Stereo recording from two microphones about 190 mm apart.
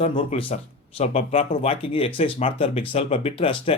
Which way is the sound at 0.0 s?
30° left (ahead or behind).